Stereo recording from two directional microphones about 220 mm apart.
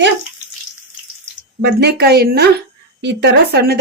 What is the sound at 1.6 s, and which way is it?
Speech, 50° right (ahead or behind).